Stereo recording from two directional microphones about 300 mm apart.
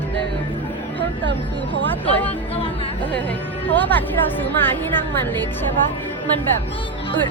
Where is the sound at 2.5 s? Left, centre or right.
Centre.